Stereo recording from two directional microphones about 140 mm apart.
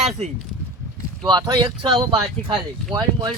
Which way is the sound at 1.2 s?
30° right (ahead or behind).